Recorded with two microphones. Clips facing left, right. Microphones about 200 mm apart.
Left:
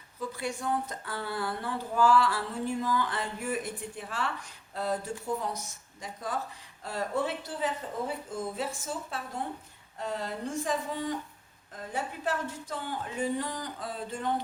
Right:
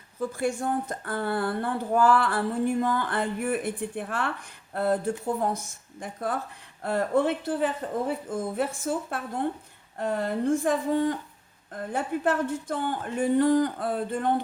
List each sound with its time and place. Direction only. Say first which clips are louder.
0.2 s a woman's voice: right 7 dB; 50° right (ahead or behind)